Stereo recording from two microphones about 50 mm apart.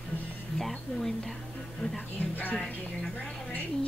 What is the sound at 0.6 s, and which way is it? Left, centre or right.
Speech, centre.